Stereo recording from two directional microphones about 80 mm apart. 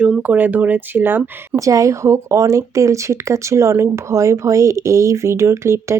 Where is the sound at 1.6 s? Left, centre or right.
Right.